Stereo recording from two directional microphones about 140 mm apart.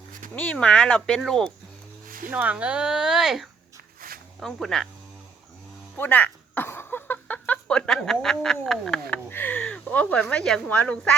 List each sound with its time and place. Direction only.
0.3 s speech: 10° left (ahead or behind)
2.0 s a sound: 80° right
2.3 s speech: 10° right (ahead or behind)
6.0 s speech: 10° left (ahead or behind)